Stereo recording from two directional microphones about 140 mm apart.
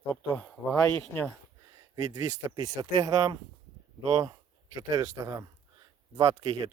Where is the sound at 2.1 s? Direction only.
30° right (ahead or behind).